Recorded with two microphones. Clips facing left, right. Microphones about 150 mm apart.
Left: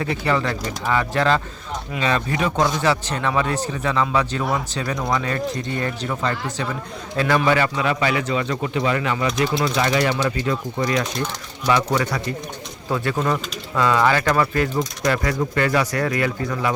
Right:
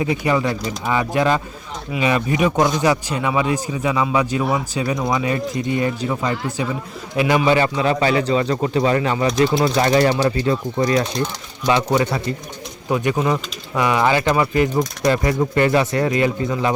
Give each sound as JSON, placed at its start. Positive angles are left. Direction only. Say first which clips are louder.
{"t": 0.0, "sound": "a man's voice", "louder": "right 3 dB", "side_deg": -15}